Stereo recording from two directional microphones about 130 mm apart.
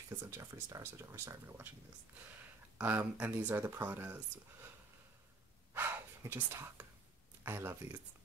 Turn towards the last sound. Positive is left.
turn(degrees=-20)  # may be behind; listen again after turning